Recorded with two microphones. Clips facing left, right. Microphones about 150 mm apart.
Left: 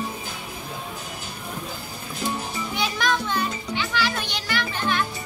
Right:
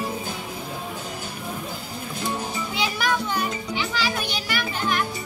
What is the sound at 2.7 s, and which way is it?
Music, 10° right (ahead or behind).